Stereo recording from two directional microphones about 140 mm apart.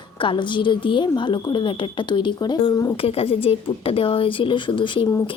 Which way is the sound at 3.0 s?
45° left (ahead or behind).